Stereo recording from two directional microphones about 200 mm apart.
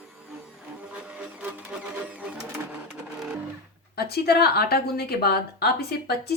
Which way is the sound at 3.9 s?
50° left (ahead or behind).